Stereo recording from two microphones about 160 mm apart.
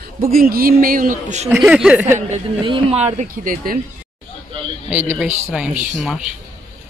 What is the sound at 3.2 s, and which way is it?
Speech, 55° right (ahead or behind).